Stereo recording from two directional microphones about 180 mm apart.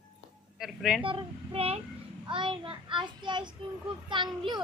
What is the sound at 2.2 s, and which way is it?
A child's voice, 25° right (ahead or behind).